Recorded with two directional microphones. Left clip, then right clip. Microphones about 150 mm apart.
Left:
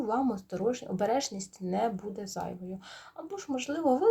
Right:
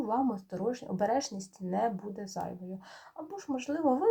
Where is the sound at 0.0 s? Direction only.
30° left (ahead or behind).